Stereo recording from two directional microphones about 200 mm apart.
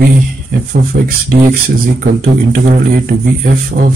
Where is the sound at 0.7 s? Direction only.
45° right (ahead or behind).